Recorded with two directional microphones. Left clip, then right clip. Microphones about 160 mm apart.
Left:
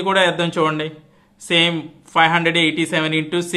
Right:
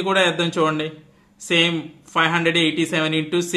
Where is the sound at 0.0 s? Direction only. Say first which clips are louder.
Left 2 dB; 25° left (ahead or behind).